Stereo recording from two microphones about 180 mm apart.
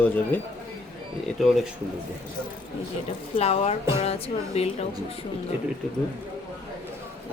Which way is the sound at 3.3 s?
35° left (ahead or behind).